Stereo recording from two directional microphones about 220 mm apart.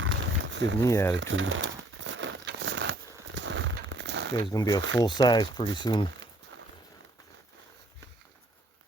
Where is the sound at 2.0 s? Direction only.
55° right (ahead or behind).